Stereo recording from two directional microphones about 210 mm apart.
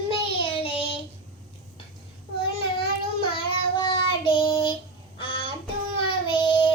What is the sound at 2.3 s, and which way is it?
Child singing, 25° left (ahead or behind).